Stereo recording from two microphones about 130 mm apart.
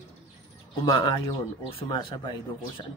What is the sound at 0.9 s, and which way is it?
Speech, 35° left (ahead or behind).